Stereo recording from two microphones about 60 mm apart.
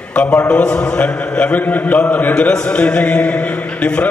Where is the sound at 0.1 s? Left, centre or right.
Left.